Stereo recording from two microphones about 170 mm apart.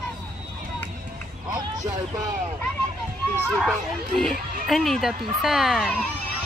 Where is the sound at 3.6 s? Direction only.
Centre (ahead or behind).